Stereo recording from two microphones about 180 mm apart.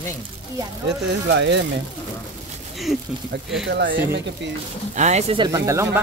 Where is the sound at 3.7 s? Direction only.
65° right (ahead or behind).